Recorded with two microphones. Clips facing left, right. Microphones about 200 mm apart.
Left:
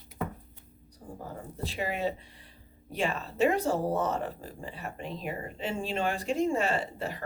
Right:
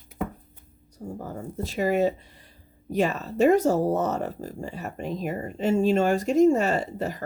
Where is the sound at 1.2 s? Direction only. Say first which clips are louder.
Right 4 dB; 45° right (ahead or behind).